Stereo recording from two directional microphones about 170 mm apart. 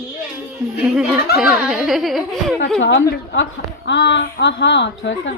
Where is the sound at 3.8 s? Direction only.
90° left.